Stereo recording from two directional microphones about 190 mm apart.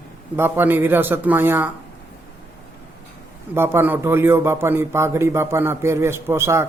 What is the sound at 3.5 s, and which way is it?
A man's voice, 10° right (ahead or behind).